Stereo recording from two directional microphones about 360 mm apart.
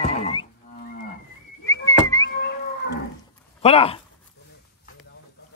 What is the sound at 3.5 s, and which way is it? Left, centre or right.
Speech, centre.